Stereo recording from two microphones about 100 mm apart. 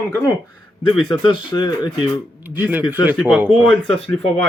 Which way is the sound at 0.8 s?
60° left (ahead or behind).